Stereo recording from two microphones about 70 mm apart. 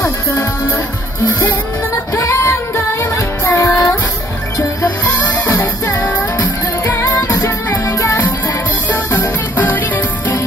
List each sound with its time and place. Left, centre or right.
0.0 s music: left
2.1 s music: left
4.8 s music: left
5.5 s music: left
6.1 s music: left